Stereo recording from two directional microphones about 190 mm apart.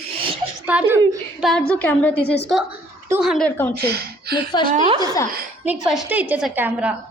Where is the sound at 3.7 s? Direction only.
60° right (ahead or behind).